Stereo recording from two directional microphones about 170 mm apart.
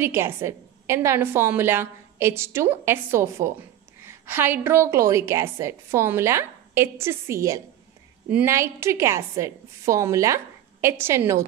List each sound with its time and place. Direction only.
0.0 s a woman's voice: 15° right (ahead or behind)